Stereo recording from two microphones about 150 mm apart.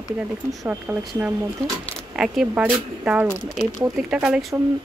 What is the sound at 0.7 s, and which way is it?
Speech, 10° right (ahead or behind).